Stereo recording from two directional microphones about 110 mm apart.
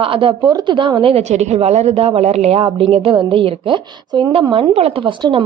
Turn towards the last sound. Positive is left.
turn(degrees=-45)  # may be behind; listen again after turning